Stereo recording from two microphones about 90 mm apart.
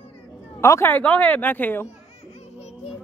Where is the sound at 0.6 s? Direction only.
30° left (ahead or behind).